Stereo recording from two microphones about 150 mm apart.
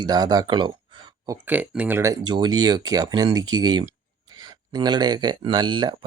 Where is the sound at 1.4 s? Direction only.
10° right (ahead or behind).